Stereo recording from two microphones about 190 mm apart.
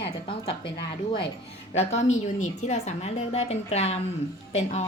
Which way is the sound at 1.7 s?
35° left (ahead or behind).